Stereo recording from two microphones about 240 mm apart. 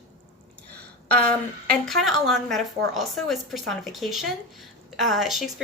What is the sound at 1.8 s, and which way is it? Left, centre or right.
A woman's voice, centre.